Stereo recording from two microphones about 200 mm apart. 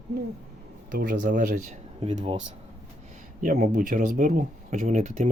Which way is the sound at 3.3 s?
40° right (ahead or behind).